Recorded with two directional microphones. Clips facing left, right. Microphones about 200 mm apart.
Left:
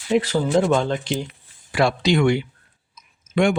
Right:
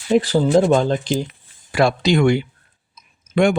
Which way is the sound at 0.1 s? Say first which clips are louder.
Right 4 dB; 35° right (ahead or behind).